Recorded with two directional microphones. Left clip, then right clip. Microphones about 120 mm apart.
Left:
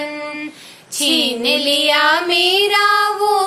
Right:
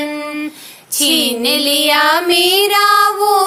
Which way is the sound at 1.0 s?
45° right (ahead or behind).